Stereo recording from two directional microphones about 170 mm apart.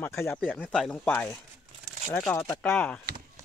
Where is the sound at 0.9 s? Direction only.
10° left (ahead or behind).